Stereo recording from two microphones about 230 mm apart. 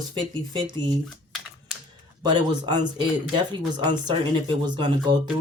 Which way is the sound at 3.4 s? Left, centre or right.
Centre.